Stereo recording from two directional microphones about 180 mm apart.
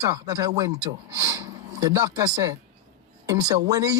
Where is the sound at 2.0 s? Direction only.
20° right (ahead or behind).